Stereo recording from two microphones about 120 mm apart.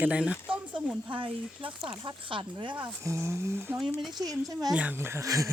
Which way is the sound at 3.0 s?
20° right (ahead or behind).